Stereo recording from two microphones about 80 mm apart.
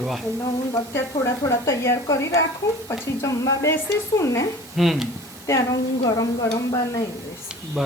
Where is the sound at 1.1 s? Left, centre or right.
Left.